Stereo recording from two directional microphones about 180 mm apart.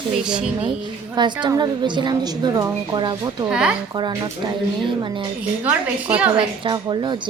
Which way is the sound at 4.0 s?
25° right (ahead or behind).